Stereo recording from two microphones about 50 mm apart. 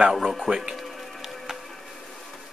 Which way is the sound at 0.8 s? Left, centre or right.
Centre.